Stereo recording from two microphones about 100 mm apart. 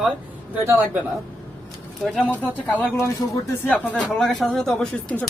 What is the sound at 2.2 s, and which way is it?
Speech, 20° left (ahead or behind).